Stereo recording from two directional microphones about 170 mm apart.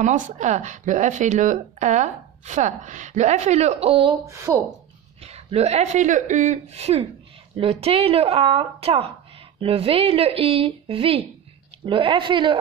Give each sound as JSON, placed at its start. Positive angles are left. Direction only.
{"t": 0.0, "sound": "speech", "side_deg": -45}
{"t": 4.3, "sound": "a woman's voice", "side_deg": -20}
{"t": 5.2, "sound": "a woman's voice", "side_deg": -40}